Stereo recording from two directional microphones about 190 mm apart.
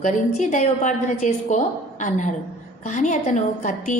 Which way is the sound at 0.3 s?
40° left (ahead or behind).